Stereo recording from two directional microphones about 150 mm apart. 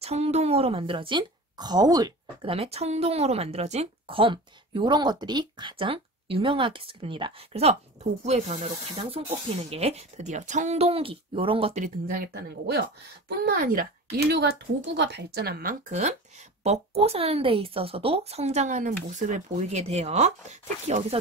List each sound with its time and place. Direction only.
0.0 s a woman's voice: 45° right (ahead or behind); by 2.5 s 25° right (ahead or behind)
2.5 s speech: 40° right (ahead or behind)
9.2 s speech: 35° right (ahead or behind)
11.8 s speech: 75° right (ahead or behind); by 21.2 s 45° right (ahead or behind)